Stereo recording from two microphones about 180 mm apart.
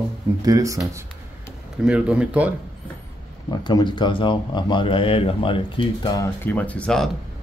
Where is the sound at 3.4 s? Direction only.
25° left (ahead or behind).